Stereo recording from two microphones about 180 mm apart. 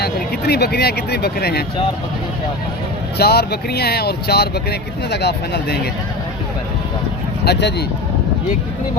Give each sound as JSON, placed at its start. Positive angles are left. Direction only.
{"t": 0.0, "sound": "speech", "side_deg": 65}
{"t": 3.2, "sound": "speech", "side_deg": 60}
{"t": 7.4, "sound": "speech", "side_deg": 65}